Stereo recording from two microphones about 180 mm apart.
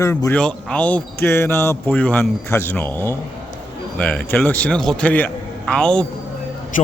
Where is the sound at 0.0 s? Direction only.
15° left (ahead or behind).